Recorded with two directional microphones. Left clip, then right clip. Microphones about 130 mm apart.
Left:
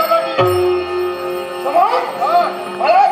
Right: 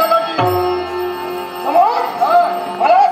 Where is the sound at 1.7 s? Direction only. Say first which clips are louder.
Right 1 dB; 45° left (ahead or behind).